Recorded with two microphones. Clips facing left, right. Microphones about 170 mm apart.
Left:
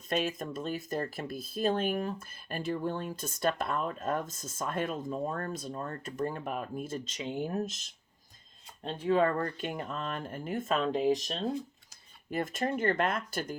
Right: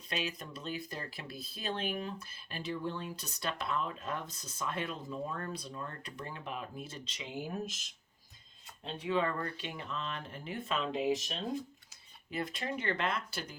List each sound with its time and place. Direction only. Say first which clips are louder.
0.1 s speech: left 7 dB; 50° left (ahead or behind)
8.8 s speech: left 6 dB; 45° left (ahead or behind)